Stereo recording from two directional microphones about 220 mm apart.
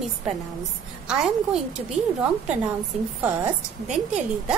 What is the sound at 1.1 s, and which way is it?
A woman's voice, 5° right (ahead or behind).